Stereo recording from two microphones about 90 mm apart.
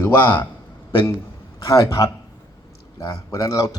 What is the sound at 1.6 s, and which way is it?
Speech, 35° left (ahead or behind).